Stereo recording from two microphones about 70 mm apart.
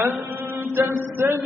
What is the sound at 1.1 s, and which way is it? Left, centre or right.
Speech, right.